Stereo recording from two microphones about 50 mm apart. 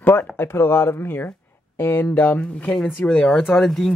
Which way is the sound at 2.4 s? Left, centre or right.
Left.